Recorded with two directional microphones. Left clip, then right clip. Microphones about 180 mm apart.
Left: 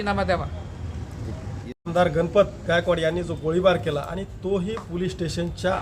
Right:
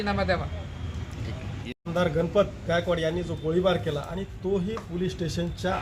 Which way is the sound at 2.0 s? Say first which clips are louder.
Left 5 dB; 35° left (ahead or behind).